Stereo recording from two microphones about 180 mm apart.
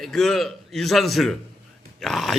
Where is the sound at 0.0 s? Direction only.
Centre (ahead or behind).